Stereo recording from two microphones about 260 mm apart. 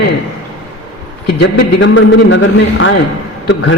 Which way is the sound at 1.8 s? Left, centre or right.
Left.